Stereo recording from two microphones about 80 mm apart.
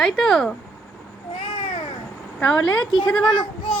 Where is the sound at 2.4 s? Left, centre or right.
Centre.